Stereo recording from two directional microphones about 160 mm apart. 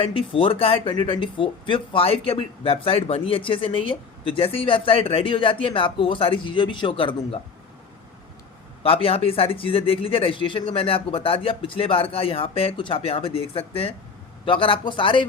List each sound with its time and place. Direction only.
0.0 s speech: 35° left (ahead or behind)
8.8 s speech: 35° left (ahead or behind)